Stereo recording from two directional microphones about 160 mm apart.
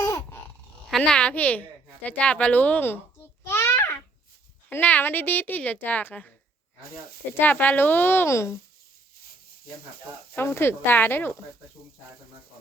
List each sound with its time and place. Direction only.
0.0 s a sound: 20° left (ahead or behind)
0.9 s speech: 5° left (ahead or behind)
3.4 s babbling: 15° left (ahead or behind)
4.7 s speech: 10° left (ahead or behind)
7.3 s speech: 10° left (ahead or behind)
10.3 s speech: 15° left (ahead or behind)